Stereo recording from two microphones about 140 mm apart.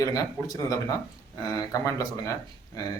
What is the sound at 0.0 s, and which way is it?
Speech, 25° left (ahead or behind).